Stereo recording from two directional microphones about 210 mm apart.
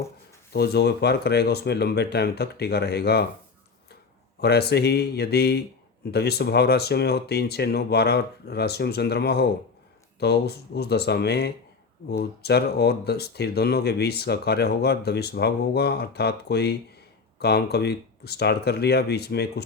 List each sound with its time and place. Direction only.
0.5 s speech: 50° left (ahead or behind)
4.4 s speech: 50° left (ahead or behind)